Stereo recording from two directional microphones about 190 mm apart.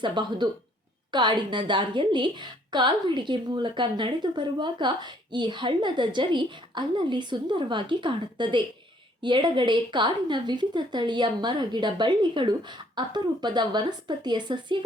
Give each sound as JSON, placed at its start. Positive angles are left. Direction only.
{"t": 0.0, "sound": "a woman's voice", "side_deg": -25}